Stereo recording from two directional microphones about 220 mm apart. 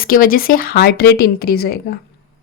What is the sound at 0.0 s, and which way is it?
Speech, 40° left (ahead or behind).